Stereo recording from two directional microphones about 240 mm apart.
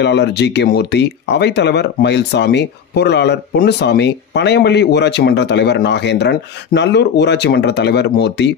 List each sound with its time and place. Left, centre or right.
0.0 s speech: left